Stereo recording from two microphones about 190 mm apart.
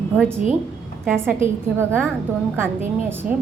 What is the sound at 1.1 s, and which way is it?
A woman's voice, 10° right (ahead or behind).